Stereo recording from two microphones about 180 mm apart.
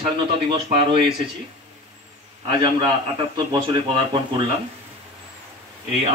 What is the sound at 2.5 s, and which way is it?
A man's voice, 30° right (ahead or behind).